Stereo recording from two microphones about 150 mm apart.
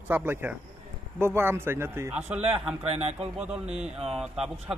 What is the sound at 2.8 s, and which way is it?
Speech, 40° right (ahead or behind).